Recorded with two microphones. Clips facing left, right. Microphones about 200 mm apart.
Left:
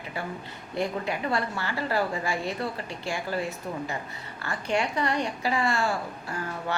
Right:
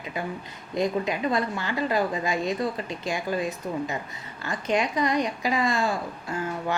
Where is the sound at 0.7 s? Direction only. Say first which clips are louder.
Right 4 dB; 15° right (ahead or behind).